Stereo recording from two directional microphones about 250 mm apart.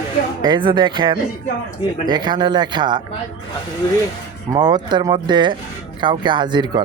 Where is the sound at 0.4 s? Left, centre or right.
Centre.